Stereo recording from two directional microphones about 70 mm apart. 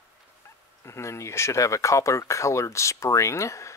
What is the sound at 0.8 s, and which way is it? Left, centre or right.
Speech, left.